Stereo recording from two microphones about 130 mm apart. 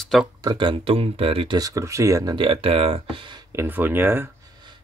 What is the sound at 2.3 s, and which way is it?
Speech, 45° right (ahead or behind).